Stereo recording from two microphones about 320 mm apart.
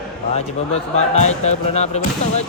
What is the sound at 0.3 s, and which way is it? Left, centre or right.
Speech, centre.